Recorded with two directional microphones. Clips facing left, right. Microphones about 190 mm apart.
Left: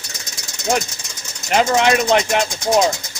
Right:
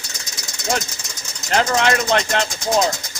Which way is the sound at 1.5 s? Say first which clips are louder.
Left 3 dB; 15° left (ahead or behind).